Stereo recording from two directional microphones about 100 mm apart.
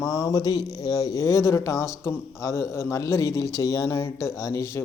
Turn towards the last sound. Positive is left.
turn(degrees=30)  # may be behind; listen again after turning